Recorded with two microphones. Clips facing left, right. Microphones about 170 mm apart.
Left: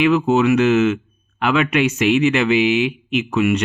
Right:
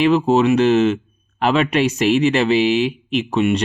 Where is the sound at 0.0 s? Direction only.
35° right (ahead or behind).